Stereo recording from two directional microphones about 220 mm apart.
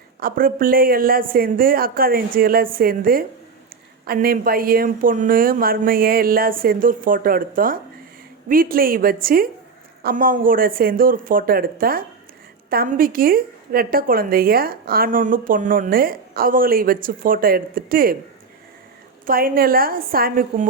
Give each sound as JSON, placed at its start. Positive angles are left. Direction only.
{"t": 0.2, "sound": "a woman's voice", "side_deg": -40}
{"t": 19.2, "sound": "a woman's voice", "side_deg": -40}